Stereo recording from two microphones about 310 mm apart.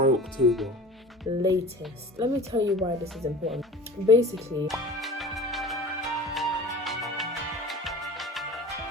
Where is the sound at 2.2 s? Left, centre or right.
Centre.